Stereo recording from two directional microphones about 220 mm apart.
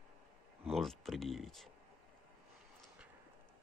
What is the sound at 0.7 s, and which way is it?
Speech, centre (ahead or behind).